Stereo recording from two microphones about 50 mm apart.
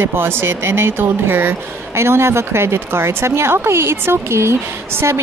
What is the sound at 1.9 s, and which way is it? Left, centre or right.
Speech, right.